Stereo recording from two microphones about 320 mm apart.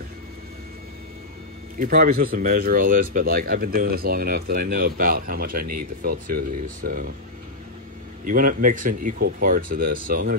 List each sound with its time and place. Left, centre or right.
1.8 s speech: right
8.3 s speech: right